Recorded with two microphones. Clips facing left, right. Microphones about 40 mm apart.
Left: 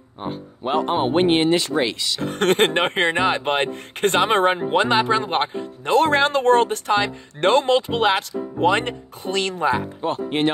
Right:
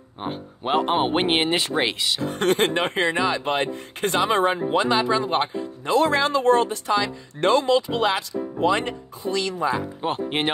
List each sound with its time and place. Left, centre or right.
0.2 s speech: right
2.2 s speech: left
10.0 s speech: centre